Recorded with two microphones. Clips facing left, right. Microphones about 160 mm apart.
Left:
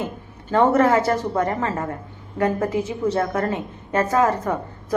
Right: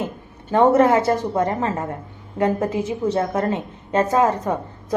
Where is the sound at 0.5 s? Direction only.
20° right (ahead or behind).